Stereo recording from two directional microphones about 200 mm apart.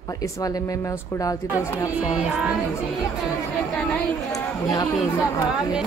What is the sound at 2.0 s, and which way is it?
Music, 5° right (ahead or behind).